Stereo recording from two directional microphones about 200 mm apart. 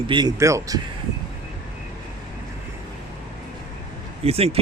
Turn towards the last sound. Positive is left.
turn(degrees=-30)  # may be behind; listen again after turning